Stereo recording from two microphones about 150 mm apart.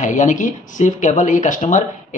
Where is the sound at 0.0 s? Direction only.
55° left (ahead or behind).